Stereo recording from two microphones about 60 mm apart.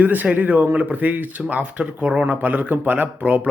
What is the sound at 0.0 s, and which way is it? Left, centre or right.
Speech, right.